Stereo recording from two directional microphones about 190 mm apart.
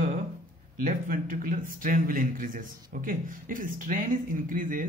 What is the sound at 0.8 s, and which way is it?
A man's voice, 45° right (ahead or behind).